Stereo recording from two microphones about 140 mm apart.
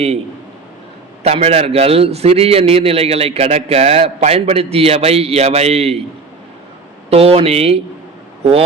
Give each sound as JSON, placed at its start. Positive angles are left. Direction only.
{"t": 1.2, "sound": "a man's voice", "side_deg": -50}
{"t": 7.1, "sound": "a man's voice", "side_deg": -45}